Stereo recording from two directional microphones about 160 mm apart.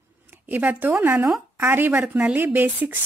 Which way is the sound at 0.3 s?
10° right (ahead or behind).